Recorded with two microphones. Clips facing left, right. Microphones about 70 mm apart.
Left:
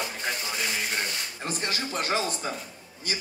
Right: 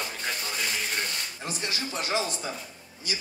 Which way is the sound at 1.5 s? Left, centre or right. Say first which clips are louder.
Left 3 dB; left.